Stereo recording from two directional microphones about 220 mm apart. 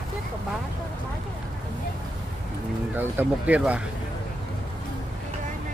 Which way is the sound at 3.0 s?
5° right (ahead or behind).